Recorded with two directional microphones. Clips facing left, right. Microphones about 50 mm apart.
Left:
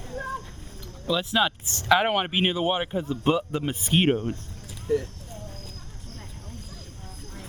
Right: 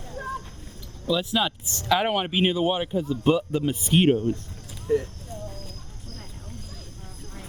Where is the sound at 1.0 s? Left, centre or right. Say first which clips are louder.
Even; left.